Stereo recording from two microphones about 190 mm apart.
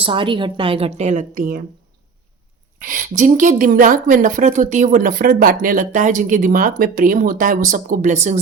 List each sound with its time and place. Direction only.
0.0 s a woman's voice: 25° right (ahead or behind); by 1.6 s 45° right (ahead or behind)
2.7 s a woman's voice: 45° right (ahead or behind)